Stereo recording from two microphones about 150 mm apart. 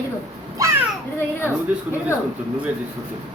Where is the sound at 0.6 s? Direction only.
20° right (ahead or behind).